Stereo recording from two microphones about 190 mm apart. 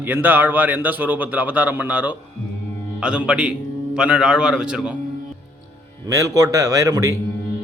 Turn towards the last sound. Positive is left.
turn(degrees=-20)  # may be behind; listen again after turning